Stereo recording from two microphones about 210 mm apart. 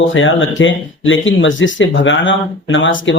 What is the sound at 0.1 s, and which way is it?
Speech, 65° left (ahead or behind).